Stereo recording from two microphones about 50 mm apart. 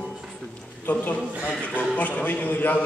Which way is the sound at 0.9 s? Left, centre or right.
Left.